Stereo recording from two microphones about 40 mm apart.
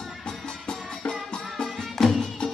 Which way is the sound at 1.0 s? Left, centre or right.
Left.